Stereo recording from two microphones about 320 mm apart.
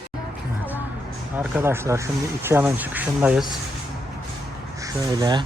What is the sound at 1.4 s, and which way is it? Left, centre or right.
Speech, centre.